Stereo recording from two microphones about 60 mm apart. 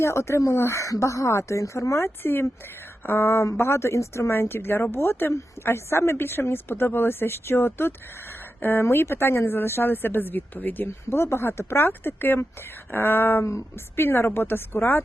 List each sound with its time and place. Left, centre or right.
0.0 s a woman's voice: left
10.8 s a woman's voice: left